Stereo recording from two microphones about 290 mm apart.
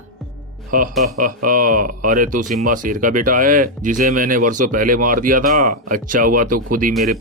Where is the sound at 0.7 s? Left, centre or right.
Right.